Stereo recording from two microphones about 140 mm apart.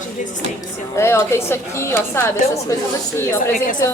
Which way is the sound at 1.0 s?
20° left (ahead or behind).